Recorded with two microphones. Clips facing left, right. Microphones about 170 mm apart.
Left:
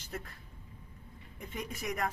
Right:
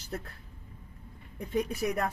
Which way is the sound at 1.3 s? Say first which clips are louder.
Right 10 dB; 35° right (ahead or behind).